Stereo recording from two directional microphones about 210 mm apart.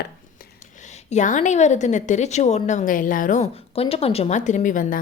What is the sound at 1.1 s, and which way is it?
A woman's voice, 35° left (ahead or behind).